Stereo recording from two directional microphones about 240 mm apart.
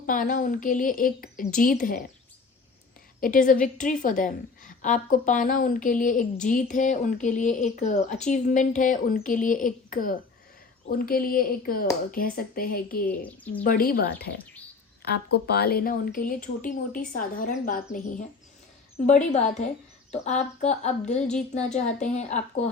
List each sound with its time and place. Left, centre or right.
0.0 s a woman's voice: left
3.2 s a woman's voice: left